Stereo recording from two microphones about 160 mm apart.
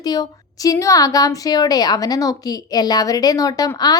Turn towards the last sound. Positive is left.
turn(degrees=25)  # may be behind; listen again after turning